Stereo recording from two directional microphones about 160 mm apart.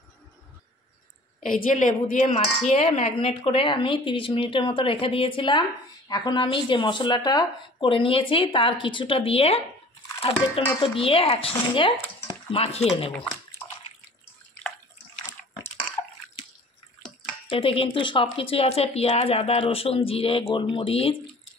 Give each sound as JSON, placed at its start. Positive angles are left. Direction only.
{"t": 1.4, "sound": "speech", "side_deg": 55}
{"t": 12.3, "sound": "stir", "side_deg": 35}
{"t": 17.5, "sound": "speech", "side_deg": 35}